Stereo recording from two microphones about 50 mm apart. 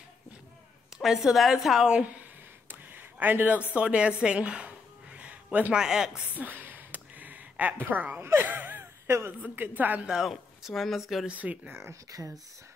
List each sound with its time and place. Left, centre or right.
1.0 s speech: centre
2.7 s a sound: right
5.8 s speech: centre
6.3 s a sound: right
7.9 s speech: right
8.2 s speech: right
8.5 s a sound: right
9.0 s a woman's voice: right
9.6 s speech: right
10.0 s speech: centre
11.2 s speech: right
11.7 s speech: right